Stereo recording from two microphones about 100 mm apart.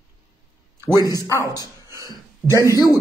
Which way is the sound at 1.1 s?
35° left (ahead or behind).